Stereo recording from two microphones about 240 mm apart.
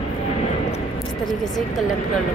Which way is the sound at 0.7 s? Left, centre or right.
Left.